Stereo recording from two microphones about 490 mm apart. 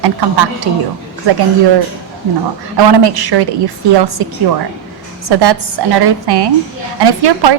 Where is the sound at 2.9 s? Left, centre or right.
Right.